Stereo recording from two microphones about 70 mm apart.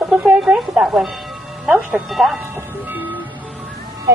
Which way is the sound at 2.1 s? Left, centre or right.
Centre.